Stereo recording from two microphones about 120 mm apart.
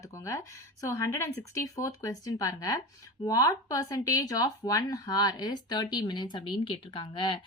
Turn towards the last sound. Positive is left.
turn(degrees=45)  # may be behind; listen again after turning